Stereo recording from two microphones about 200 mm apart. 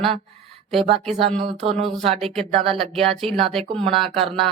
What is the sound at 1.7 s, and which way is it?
Speech, centre (ahead or behind).